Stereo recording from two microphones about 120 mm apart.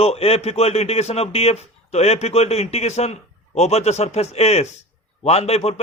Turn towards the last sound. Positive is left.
turn(degrees=60)  # may be behind; listen again after turning